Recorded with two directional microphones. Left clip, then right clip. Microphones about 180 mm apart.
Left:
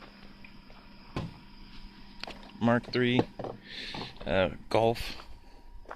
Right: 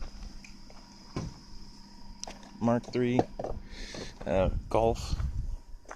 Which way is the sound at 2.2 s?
35° left (ahead or behind).